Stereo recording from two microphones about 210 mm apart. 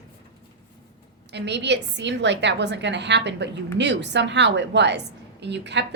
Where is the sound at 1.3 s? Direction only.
55° right (ahead or behind).